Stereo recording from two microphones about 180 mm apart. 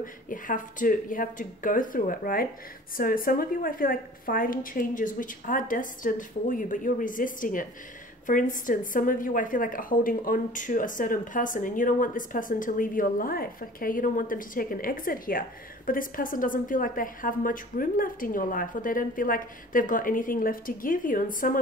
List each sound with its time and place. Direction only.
0.0 s a woman's voice: 50° left (ahead or behind)